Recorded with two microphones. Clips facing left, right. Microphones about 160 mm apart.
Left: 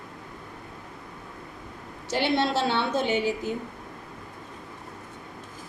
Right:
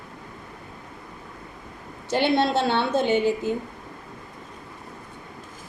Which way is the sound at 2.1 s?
55° right (ahead or behind).